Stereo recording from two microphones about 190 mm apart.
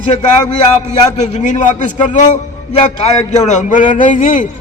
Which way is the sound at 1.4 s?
40° left (ahead or behind).